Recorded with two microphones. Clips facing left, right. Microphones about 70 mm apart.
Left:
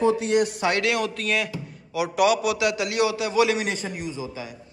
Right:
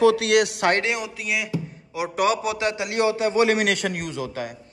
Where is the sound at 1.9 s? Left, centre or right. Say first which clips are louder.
Left 2 dB; right.